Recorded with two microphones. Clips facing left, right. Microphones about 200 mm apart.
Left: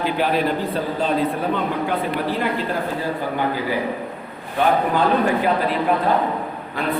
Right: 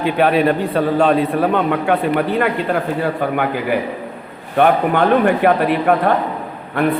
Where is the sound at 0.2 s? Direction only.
70° right (ahead or behind).